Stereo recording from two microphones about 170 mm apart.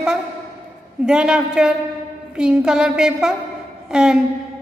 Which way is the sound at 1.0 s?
5° right (ahead or behind).